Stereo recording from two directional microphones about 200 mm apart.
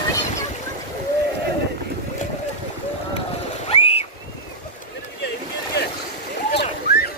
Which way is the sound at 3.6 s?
30° left (ahead or behind).